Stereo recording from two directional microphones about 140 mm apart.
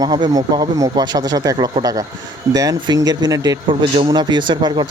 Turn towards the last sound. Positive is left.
turn(degrees=-30)  # may be behind; listen again after turning